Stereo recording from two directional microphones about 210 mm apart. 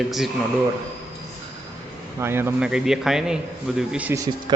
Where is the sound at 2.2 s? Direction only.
10° right (ahead or behind).